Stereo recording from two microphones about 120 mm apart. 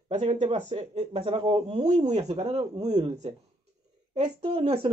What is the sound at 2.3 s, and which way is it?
Speech, 55° right (ahead or behind).